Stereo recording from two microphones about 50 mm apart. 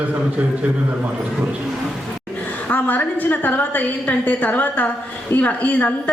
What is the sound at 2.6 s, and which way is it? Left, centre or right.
A woman's voice, left.